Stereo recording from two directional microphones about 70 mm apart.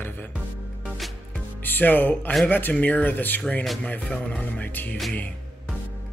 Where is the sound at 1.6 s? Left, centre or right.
Left.